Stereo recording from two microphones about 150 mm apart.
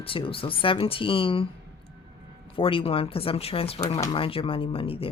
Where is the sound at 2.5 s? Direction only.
35° left (ahead or behind).